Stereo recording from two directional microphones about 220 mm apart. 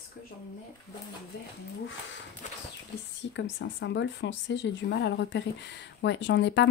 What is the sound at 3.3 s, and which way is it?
Speech, 55° left (ahead or behind).